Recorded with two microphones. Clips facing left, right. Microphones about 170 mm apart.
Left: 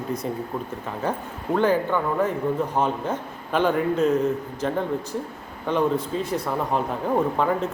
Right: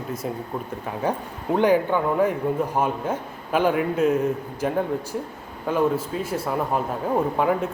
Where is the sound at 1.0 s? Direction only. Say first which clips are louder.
Right 2 dB; 10° right (ahead or behind).